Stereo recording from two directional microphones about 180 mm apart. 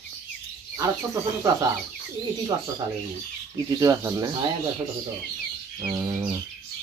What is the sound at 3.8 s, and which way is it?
Bird, 20° right (ahead or behind).